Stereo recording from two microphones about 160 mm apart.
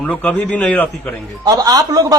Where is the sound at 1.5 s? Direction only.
20° right (ahead or behind).